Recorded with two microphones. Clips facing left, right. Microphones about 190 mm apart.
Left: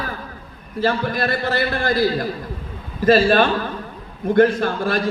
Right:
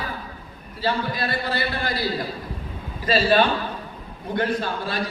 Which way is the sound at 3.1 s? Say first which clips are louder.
Left 5 dB; 50° left (ahead or behind).